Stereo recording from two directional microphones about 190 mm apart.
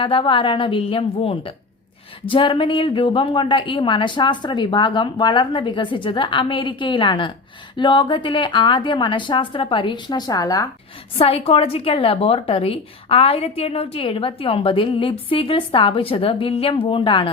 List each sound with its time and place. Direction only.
0.0 s a woman's voice: 25° left (ahead or behind)
11.2 s a woman's voice: 30° left (ahead or behind)